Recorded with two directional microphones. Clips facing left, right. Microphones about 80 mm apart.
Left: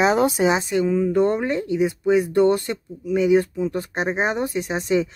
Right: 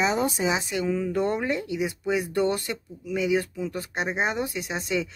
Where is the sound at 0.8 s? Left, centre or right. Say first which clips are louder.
Left 5 dB; centre.